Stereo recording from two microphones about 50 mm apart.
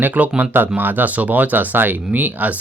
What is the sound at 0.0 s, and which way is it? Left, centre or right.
Speech, right.